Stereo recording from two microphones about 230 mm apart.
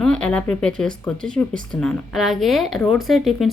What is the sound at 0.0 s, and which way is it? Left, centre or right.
Speech, centre.